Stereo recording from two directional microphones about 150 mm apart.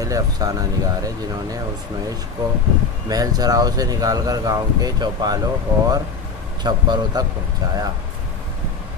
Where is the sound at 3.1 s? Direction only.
25° right (ahead or behind).